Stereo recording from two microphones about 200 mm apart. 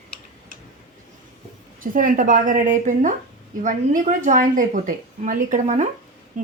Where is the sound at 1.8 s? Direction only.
45° right (ahead or behind).